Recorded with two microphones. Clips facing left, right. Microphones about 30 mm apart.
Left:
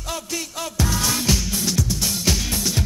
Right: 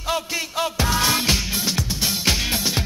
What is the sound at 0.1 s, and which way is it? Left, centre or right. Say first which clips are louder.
Music: right 5 dB; right.